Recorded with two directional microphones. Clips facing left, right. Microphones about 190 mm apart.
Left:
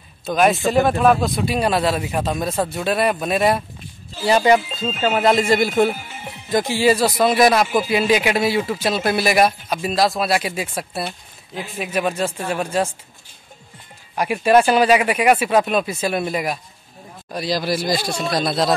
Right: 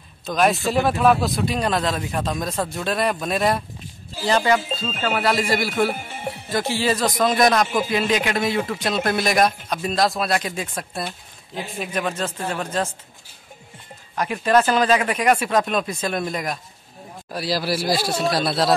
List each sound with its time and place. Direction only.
0.2 s a man's voice: 5° left (ahead or behind)
4.2 s a man's voice: 15° left (ahead or behind)
14.1 s speech: 10° left (ahead or behind)
17.3 s a man's voice: 5° right (ahead or behind)